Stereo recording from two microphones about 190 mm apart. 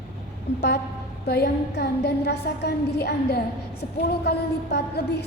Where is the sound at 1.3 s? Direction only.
55° left (ahead or behind).